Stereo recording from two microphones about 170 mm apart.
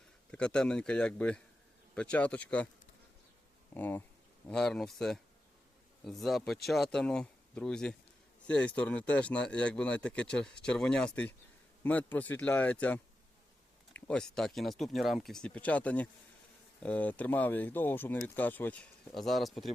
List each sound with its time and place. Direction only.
0.3 s speech: 5° left (ahead or behind)
3.8 s speech: 10° left (ahead or behind)